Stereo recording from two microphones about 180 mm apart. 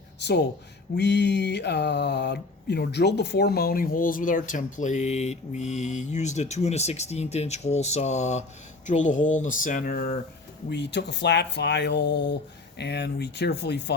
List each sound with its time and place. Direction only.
0.2 s speech: 70° left (ahead or behind); by 10.2 s 50° left (ahead or behind)
10.7 s speech: 75° left (ahead or behind)